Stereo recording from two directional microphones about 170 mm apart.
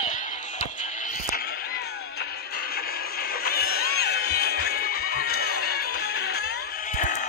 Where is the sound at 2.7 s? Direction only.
60° left (ahead or behind).